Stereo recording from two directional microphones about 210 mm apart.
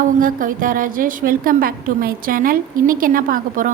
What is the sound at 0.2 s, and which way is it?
A woman's voice, 40° right (ahead or behind).